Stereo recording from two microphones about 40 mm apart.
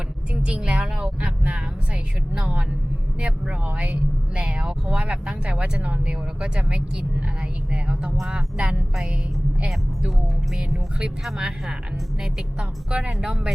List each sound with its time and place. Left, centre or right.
0.4 s speech: right
9.6 s speech: centre
11.0 s speech: right